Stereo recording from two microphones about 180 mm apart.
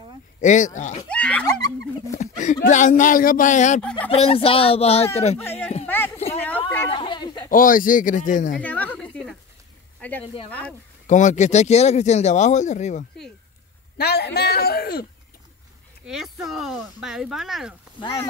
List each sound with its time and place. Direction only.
0.4 s speech: 45° left (ahead or behind)
1.0 s speech: 5° left (ahead or behind)
2.1 s speech: 40° left (ahead or behind)
4.1 s speech: 30° left (ahead or behind)
5.4 s speech: 10° left (ahead or behind)
5.9 s a sound: 10° left (ahead or behind)
6.9 s a sound: 25° left (ahead or behind)
7.5 s speech: 50° left (ahead or behind)
8.5 s a sound: 10° left (ahead or behind)
10.2 s speech: 30° left (ahead or behind)
11.1 s speech: 45° left (ahead or behind)
13.9 s a man's voice: 65° left (ahead or behind)
16.1 s speech: centre (ahead or behind)